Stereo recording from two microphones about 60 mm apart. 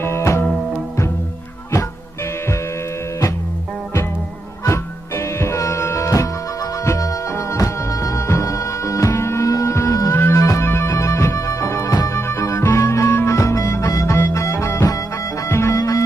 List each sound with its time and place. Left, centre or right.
0.0 s music: left
4.6 s music: left
7.3 s music: left
9.5 s music: left
10.1 s music: left
10.4 s music: left
15.7 s music: left